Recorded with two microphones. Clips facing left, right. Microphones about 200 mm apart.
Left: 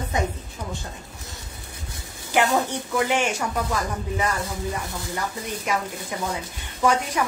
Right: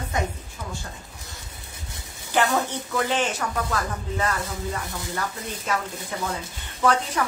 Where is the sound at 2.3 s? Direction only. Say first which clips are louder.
Left 2 dB; 15° left (ahead or behind).